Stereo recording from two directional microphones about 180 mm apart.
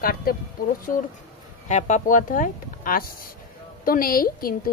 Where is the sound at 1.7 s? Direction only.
40° left (ahead or behind).